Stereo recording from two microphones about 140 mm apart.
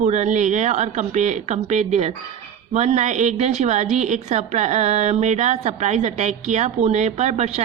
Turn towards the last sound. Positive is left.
turn(degrees=-55)  # may be behind; listen again after turning